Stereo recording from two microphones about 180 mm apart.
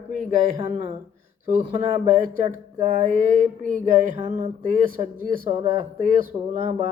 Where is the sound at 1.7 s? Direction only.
45° right (ahead or behind).